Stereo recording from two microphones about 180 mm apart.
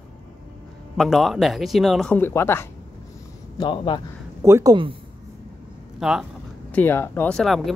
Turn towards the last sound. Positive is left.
turn(degrees=0)  # may be behind; listen again after turning